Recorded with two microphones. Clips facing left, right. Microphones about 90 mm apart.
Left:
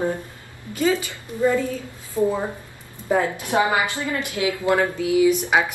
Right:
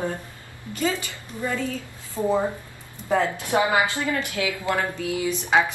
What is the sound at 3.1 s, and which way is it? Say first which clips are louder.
A woman's voice: left 1 dB; 20° left (ahead or behind).